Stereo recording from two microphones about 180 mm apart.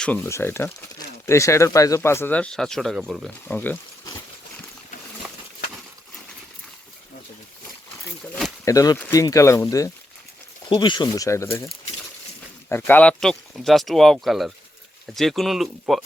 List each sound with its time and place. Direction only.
0.0 s speech: 10° left (ahead or behind)
3.2 s speech: 10° left (ahead or behind)
8.6 s speech: 20° left (ahead or behind)
12.6 s speech: 10° left (ahead or behind)